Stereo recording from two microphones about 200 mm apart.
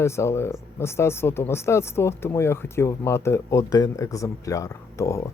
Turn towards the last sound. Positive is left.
turn(degrees=15)  # may be behind; listen again after turning